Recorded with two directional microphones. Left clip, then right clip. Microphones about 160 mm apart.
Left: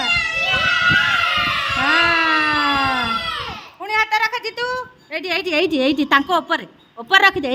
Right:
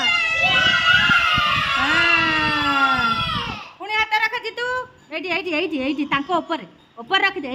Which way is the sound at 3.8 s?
10° left (ahead or behind).